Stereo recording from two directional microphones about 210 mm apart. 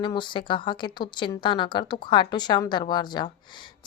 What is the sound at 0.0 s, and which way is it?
A woman's voice, 20° left (ahead or behind).